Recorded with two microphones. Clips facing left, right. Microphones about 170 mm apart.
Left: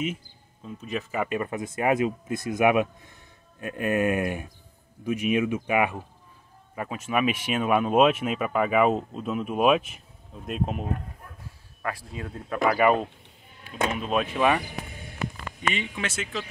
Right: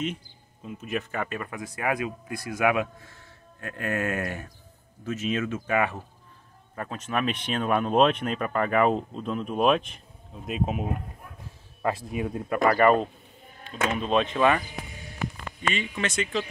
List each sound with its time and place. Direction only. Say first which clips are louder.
0.7 s speech: right 1 dB; 5° right (ahead or behind)
1.4 s speech: left 5 dB; 20° left (ahead or behind); by 11.0 s 5° right (ahead or behind)
11.8 s speech: right 6 dB; 20° right (ahead or behind)
12.5 s speech: right 1 dB; 5° left (ahead or behind)
15.7 s speech: right 4 dB; 20° left (ahead or behind)
16.1 s speech: right 4 dB; 5° left (ahead or behind)